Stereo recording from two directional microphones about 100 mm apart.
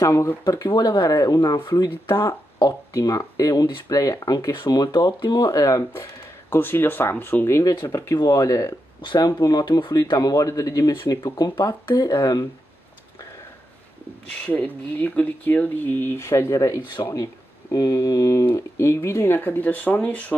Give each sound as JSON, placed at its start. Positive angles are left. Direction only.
{"t": 0.0, "sound": "a man's voice", "side_deg": 30}
{"t": 0.4, "sound": "a man's voice", "side_deg": 45}
{"t": 1.9, "sound": "a man's voice", "side_deg": 25}
{"t": 6.5, "sound": "a man's voice", "side_deg": 20}
{"t": 9.0, "sound": "a man's voice", "side_deg": 45}
{"t": 14.4, "sound": "speech", "side_deg": 15}